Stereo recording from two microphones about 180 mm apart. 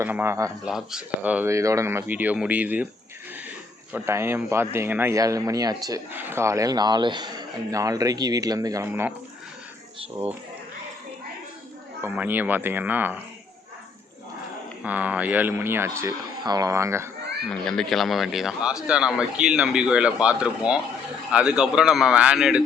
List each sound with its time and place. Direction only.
0.0 s speech: 10° right (ahead or behind)
0.6 s speech: 5° right (ahead or behind)
3.9 s speech: 15° right (ahead or behind)
12.0 s speech: 10° right (ahead or behind)
14.8 s speech: 10° right (ahead or behind)
17.5 s speech: 5° left (ahead or behind)